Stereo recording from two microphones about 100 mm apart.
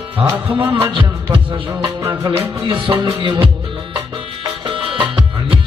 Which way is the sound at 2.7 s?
55° right (ahead or behind).